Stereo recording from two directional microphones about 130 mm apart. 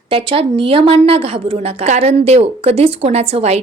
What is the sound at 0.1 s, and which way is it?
A woman's voice, 45° right (ahead or behind).